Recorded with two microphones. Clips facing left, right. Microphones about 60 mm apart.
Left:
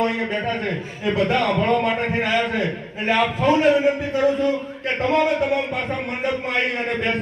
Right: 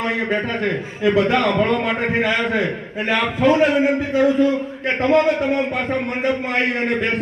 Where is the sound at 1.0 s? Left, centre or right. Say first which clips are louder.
Right 4 dB; right.